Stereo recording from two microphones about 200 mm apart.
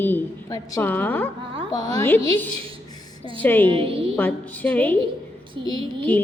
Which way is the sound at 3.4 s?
10° left (ahead or behind).